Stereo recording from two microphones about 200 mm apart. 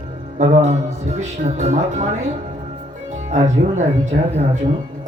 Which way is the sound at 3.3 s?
35° right (ahead or behind).